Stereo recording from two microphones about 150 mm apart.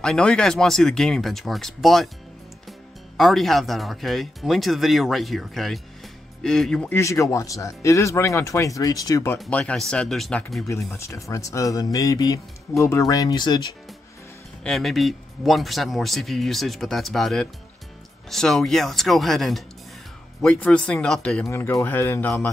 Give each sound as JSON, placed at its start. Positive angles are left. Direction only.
{"t": 0.0, "sound": "speech", "side_deg": 5}
{"t": 3.2, "sound": "speech", "side_deg": 0}
{"t": 7.0, "sound": "speech", "side_deg": 20}
{"t": 9.4, "sound": "speech", "side_deg": 10}
{"t": 10.9, "sound": "speech", "side_deg": 20}
{"t": 14.6, "sound": "a man's voice", "side_deg": 0}
{"t": 21.5, "sound": "a man's voice", "side_deg": 15}